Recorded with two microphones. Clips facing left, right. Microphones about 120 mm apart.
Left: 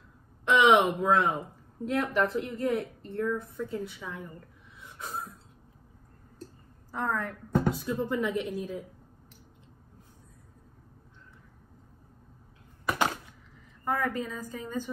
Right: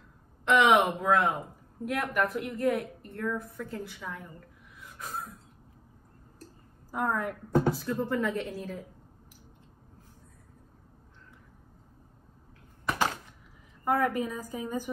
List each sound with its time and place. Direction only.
0.5 s a woman's voice: 20° left (ahead or behind)
4.7 s a sound: 25° left (ahead or behind)
6.9 s a woman's voice: 10° right (ahead or behind)
7.7 s a woman's voice: 15° left (ahead or behind)
13.8 s a woman's voice: 15° right (ahead or behind)